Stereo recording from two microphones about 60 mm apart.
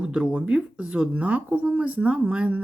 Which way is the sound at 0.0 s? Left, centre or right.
Centre.